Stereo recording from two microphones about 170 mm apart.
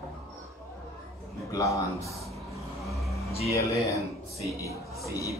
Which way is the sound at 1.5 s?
20° left (ahead or behind).